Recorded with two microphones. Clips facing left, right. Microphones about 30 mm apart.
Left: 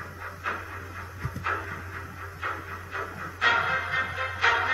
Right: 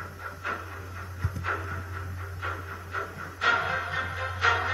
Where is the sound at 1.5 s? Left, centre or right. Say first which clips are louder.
Left 2 dB; centre.